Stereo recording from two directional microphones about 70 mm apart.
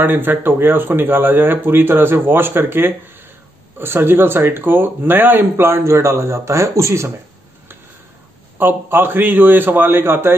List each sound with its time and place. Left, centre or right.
0.0 s speech: right
8.5 s speech: right